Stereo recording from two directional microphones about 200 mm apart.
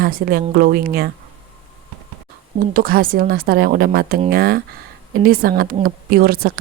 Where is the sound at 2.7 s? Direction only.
45° right (ahead or behind).